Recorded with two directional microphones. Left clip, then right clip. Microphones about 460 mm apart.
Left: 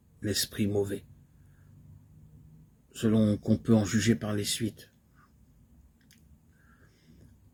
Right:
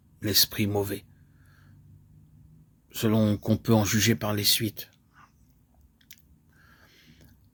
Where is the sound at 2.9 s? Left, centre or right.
Centre.